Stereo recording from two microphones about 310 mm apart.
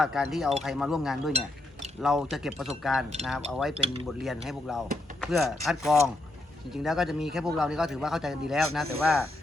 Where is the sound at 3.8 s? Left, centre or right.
Centre.